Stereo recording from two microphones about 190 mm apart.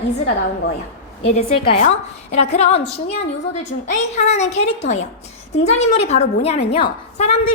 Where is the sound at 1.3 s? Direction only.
40° left (ahead or behind).